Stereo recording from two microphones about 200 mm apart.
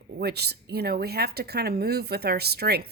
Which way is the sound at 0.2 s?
55° right (ahead or behind).